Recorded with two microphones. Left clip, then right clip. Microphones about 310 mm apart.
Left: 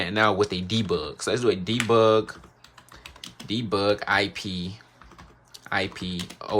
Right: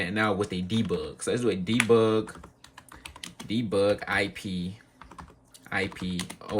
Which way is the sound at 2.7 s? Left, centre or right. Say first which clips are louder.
Even; right.